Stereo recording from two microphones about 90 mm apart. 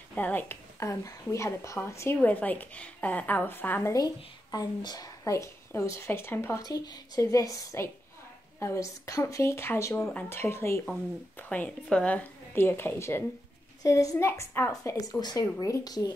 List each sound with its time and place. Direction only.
0.1 s a woman's voice: 20° left (ahead or behind)
0.7 s speech: 35° left (ahead or behind)
2.2 s a woman's voice: 20° left (ahead or behind)
3.9 s speech: 45° left (ahead or behind); by 6.6 s 25° left (ahead or behind)
6.6 s a woman's voice: 45° left (ahead or behind); by 10.8 s 30° left (ahead or behind)
11.3 s a woman's voice: 20° left (ahead or behind)
12.5 s a woman's voice: 25° left (ahead or behind)
14.7 s speech: 40° left (ahead or behind)